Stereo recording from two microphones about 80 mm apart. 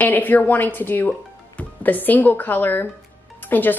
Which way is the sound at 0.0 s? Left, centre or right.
Left.